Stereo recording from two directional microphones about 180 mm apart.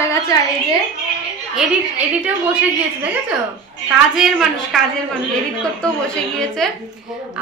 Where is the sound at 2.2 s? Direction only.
5° right (ahead or behind).